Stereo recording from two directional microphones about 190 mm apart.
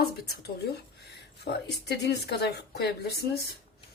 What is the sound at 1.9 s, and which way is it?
A woman's voice, 60° left (ahead or behind).